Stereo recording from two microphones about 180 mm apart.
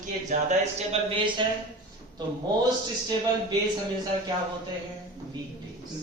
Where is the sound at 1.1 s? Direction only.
25° right (ahead or behind).